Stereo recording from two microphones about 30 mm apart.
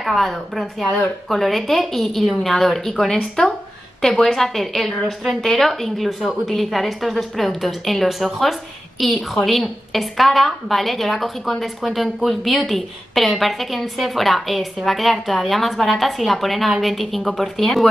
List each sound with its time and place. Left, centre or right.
0.0 s a woman's voice: centre
3.4 s speech: left
4.0 s a woman's voice: centre
17.6 s a woman's voice: centre